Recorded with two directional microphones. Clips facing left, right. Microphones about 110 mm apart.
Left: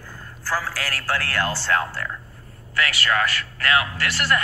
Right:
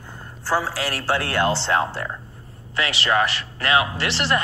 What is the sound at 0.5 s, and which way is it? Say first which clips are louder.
A man's voice: right 4 dB; 25° right (ahead or behind).